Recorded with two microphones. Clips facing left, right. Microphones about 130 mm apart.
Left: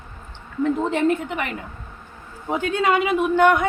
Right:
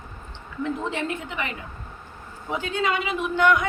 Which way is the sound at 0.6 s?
45° left (ahead or behind).